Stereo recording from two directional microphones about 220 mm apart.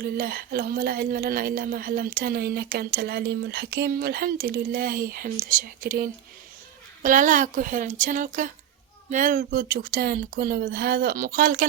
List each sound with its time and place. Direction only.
0.0 s a woman's voice: 45° right (ahead or behind)